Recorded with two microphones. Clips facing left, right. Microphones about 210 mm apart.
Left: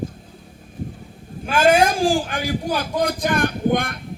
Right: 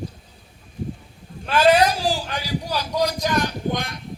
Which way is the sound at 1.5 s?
50° left (ahead or behind).